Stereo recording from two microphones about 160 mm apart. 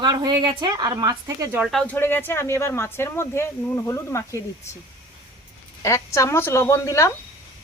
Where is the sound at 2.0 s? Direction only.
15° left (ahead or behind).